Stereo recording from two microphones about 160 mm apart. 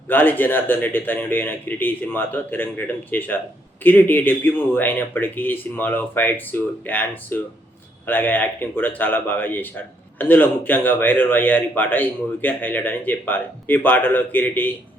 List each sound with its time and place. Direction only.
0.1 s a man's voice: 10° left (ahead or behind)